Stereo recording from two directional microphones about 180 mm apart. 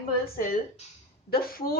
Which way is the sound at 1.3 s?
55° left (ahead or behind).